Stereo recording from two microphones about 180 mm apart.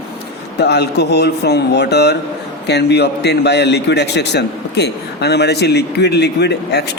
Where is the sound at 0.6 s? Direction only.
70° left (ahead or behind).